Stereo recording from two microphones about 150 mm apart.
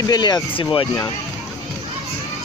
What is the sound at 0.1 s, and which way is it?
Speech, 30° left (ahead or behind).